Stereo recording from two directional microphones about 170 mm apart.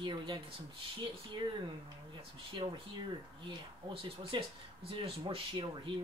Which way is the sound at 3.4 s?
30° right (ahead or behind).